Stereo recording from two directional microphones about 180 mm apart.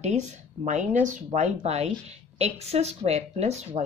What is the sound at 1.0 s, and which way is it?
A woman's voice, 40° right (ahead or behind).